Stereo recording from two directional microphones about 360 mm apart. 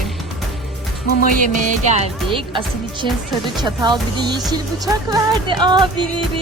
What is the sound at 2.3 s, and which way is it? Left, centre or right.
Speech, centre.